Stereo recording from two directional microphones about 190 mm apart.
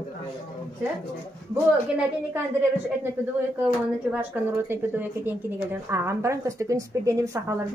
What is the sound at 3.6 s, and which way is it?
A woman's voice, 5° right (ahead or behind).